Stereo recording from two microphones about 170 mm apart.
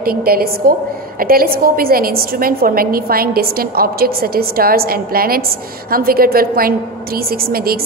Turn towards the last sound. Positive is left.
turn(degrees=-60)  # may be behind; listen again after turning